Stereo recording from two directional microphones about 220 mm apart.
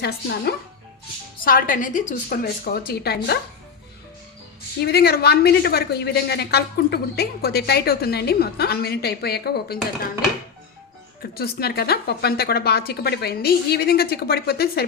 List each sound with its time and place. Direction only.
0.0 s a woman's voice: 45° left (ahead or behind)
4.8 s a woman's voice: 45° left (ahead or behind)
11.3 s a woman's voice: 45° left (ahead or behind)